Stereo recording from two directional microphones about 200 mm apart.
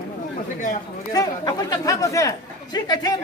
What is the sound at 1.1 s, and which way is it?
Speech, 20° left (ahead or behind).